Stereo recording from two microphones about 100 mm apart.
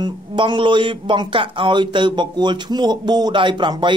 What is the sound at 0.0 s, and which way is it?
Speech, 50° right (ahead or behind).